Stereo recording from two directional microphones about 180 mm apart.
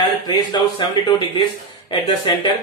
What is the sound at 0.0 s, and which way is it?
Speech, 25° left (ahead or behind).